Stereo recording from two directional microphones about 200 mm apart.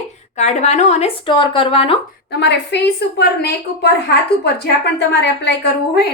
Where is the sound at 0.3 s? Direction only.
35° left (ahead or behind).